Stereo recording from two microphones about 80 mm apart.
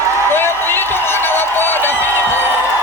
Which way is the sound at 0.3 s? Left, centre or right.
Left.